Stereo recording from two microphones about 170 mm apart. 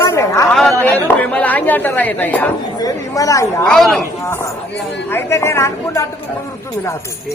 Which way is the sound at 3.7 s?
Centre (ahead or behind).